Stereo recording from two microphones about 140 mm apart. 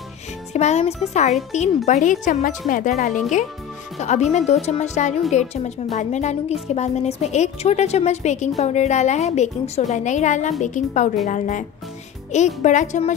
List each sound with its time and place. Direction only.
0.5 s music: 50° left (ahead or behind)
1.5 s a woman's voice: 55° left (ahead or behind)